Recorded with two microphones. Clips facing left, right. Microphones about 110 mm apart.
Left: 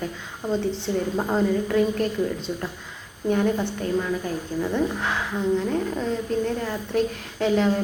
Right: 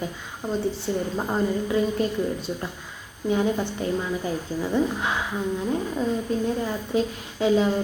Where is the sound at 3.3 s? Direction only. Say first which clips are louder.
Left 1 dB; 10° right (ahead or behind).